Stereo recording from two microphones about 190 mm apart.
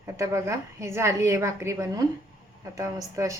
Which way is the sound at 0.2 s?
15° right (ahead or behind).